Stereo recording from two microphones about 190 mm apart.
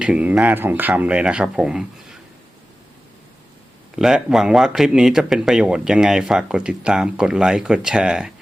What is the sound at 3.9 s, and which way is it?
Speech, 5° right (ahead or behind).